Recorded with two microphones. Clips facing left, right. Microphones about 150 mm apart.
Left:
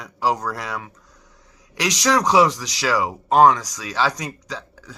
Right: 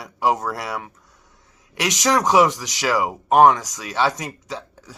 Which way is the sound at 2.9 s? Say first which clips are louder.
Right 1 dB; 15° right (ahead or behind).